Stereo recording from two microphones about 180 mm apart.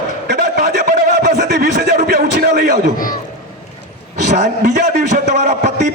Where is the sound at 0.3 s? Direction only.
65° right (ahead or behind).